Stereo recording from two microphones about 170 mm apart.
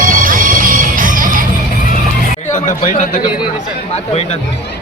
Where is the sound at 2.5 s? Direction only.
45° left (ahead or behind).